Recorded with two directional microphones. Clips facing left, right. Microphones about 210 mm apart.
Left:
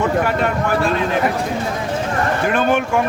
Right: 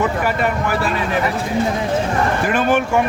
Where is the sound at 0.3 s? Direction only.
5° right (ahead or behind).